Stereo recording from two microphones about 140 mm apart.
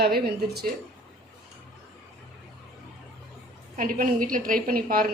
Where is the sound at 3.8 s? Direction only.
75° right (ahead or behind).